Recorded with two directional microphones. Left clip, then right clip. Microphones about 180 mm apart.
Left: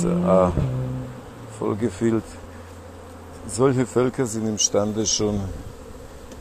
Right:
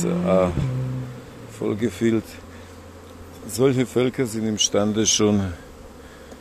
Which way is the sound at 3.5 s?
25° right (ahead or behind).